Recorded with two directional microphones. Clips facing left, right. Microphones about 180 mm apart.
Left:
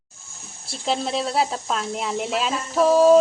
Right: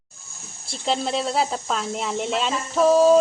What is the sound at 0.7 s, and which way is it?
Speech, centre (ahead or behind).